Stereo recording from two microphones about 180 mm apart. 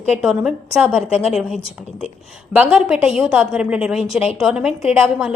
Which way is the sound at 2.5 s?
10° right (ahead or behind).